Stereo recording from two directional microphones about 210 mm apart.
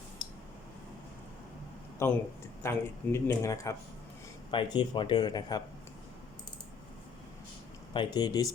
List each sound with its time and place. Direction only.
2.0 s speech: 10° left (ahead or behind)
7.9 s speech: 20° left (ahead or behind)